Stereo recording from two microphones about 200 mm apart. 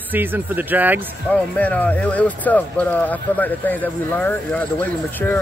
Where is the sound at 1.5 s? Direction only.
5° left (ahead or behind).